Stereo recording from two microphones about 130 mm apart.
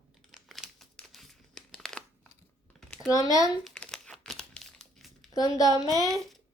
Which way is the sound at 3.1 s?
25° left (ahead or behind).